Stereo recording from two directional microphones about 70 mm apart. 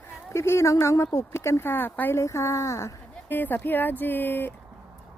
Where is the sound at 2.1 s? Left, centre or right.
Left.